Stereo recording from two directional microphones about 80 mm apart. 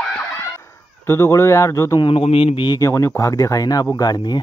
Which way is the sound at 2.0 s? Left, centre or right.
Left.